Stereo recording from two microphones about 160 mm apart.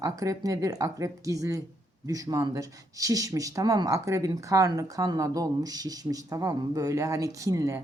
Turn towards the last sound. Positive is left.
turn(degrees=-20)  # may be behind; listen again after turning